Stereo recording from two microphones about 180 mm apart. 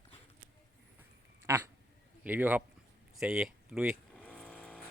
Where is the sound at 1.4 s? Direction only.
15° right (ahead or behind).